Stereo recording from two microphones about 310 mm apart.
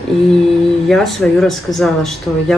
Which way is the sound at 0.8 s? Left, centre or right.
Centre.